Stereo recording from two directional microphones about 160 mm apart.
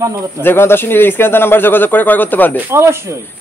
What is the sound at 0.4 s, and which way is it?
Speech, 15° left (ahead or behind).